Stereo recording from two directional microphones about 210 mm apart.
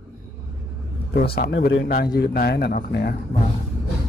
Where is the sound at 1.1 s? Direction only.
45° left (ahead or behind).